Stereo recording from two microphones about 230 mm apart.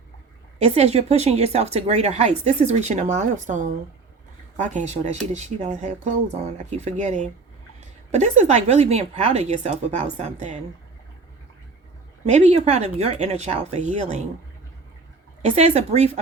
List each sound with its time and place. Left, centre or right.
0.6 s speech: right
12.2 s speech: right
15.4 s speech: right